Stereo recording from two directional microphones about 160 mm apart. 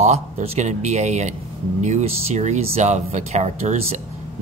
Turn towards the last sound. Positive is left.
turn(degrees=-45)  # may be behind; listen again after turning